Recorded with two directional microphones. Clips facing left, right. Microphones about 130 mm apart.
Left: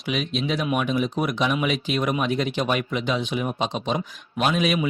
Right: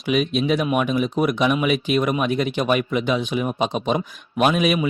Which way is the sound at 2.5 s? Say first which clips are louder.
Right 4 dB; 15° right (ahead or behind).